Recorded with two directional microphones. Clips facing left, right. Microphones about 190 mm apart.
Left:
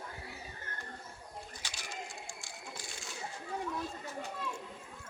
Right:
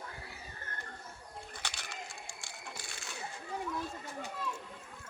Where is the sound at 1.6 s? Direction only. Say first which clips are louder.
Right 1 dB; 60° right (ahead or behind).